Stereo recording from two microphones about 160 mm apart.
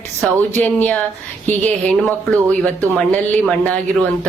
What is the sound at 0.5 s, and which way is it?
Speech, 10° left (ahead or behind).